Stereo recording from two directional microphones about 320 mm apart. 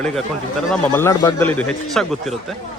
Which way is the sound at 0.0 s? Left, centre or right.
Centre.